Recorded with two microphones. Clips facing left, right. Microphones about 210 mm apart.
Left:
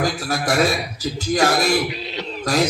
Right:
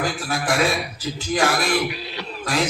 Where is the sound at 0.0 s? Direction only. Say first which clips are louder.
Left 3 dB; 40° left (ahead or behind).